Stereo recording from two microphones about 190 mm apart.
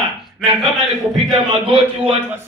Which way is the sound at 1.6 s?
30° right (ahead or behind).